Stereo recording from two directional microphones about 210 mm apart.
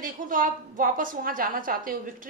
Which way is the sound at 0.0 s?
40° right (ahead or behind).